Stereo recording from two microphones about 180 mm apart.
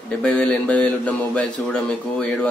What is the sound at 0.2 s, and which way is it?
A man's voice, 5° left (ahead or behind).